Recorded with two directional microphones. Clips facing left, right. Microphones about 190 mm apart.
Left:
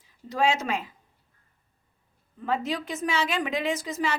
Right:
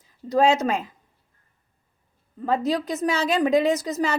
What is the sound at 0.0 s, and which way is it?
Speech, 40° right (ahead or behind).